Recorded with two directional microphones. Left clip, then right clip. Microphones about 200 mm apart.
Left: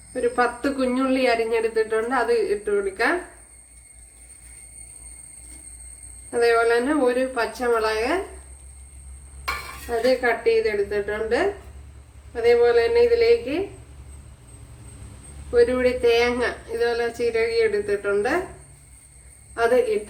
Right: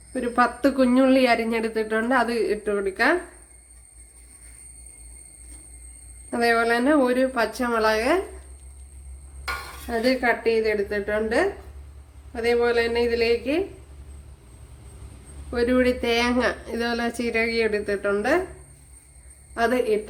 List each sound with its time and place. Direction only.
0.1 s speech: 50° right (ahead or behind)
6.3 s speech: 45° right (ahead or behind)
9.9 s speech: 50° right (ahead or behind)
15.5 s speech: 50° right (ahead or behind)
19.5 s speech: 45° right (ahead or behind)